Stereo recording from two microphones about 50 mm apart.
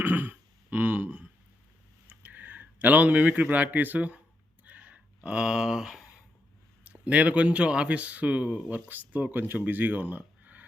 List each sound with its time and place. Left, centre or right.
0.0 s throat clearing: right
2.0 s speech: right
4.6 s a sound: right; by 5.9 s centre
6.8 s speech: right